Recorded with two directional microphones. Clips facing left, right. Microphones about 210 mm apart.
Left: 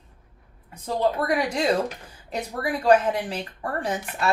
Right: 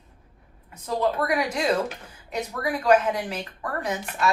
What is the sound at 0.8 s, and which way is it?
Speech, 30° left (ahead or behind).